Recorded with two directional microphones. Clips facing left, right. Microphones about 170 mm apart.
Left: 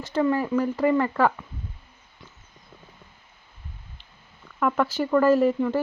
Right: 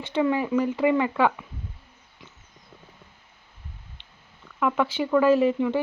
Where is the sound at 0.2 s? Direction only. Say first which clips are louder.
Even; 10° right (ahead or behind).